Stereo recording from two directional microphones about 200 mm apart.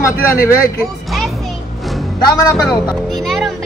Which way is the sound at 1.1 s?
Centre (ahead or behind).